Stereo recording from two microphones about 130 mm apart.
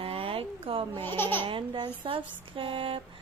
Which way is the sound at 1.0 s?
15° left (ahead or behind).